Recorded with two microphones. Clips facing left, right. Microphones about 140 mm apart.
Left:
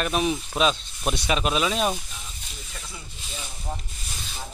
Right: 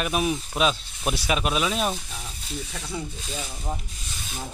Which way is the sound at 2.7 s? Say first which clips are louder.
Right 7 dB; 70° right (ahead or behind).